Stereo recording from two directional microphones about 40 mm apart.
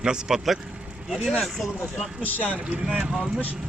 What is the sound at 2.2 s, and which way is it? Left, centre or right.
Speech, left.